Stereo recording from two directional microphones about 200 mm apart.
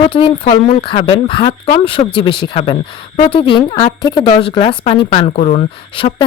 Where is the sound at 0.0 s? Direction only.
25° left (ahead or behind).